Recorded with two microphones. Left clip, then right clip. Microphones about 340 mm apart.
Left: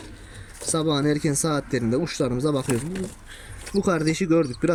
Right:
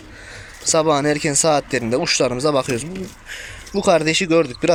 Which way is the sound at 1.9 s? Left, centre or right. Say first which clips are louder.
Right 10 dB; centre.